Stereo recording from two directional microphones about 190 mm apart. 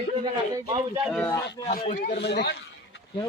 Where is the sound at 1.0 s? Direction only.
5° left (ahead or behind).